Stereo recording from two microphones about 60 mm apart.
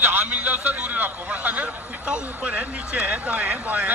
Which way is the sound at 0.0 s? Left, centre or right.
Right.